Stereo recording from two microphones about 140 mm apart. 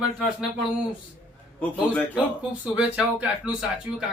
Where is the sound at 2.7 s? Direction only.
10° right (ahead or behind).